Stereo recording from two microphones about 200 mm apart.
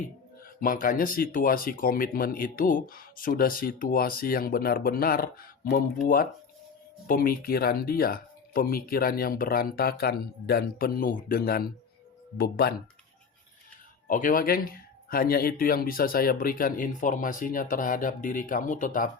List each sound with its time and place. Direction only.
0.6 s speech: 45° left (ahead or behind)
14.1 s speech: 45° left (ahead or behind)